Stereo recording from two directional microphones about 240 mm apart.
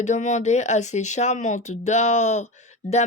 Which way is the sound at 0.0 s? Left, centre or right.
Left.